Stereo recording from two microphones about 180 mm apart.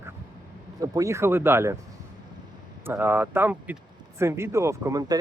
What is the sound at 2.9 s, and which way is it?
Speech, 10° right (ahead or behind).